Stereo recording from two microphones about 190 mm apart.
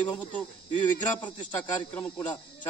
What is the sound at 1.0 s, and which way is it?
Speech, 25° left (ahead or behind).